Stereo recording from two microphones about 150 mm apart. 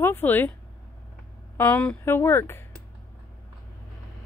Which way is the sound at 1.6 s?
10° left (ahead or behind).